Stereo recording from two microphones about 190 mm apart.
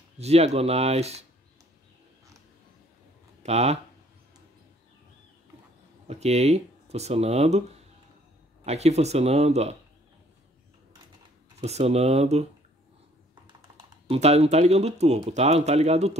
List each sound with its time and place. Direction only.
0.2 s speech: 35° right (ahead or behind)
3.4 s speech: 35° right (ahead or behind)
6.0 s speech: 35° right (ahead or behind)
8.6 s speech: 35° right (ahead or behind)
11.6 s speech: 35° right (ahead or behind)
14.0 s speech: 30° right (ahead or behind)